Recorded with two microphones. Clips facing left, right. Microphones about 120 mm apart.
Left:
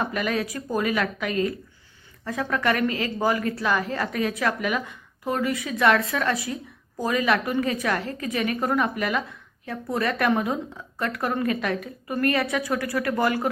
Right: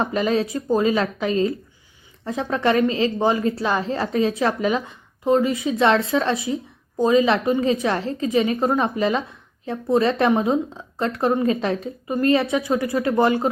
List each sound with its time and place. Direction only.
0.0 s a woman's voice: 25° right (ahead or behind)